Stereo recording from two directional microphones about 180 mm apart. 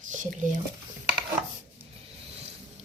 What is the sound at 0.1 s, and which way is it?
Speech, 45° right (ahead or behind).